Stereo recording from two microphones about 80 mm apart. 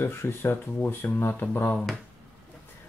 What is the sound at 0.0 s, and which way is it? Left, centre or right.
Speech, left.